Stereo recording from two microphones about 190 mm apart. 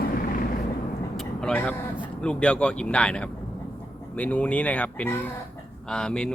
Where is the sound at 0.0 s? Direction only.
50° left (ahead or behind).